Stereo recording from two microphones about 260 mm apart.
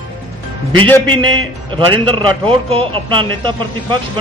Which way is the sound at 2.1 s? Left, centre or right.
Centre.